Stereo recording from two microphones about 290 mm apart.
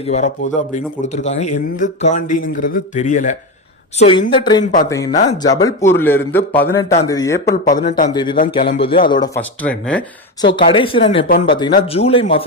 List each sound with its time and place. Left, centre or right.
0.1 s a man's voice: left
7.4 s a man's voice: left
8.1 s a man's voice: centre
10.4 s a man's voice: centre